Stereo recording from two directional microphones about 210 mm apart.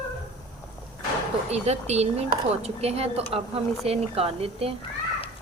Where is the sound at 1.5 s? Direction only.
30° right (ahead or behind).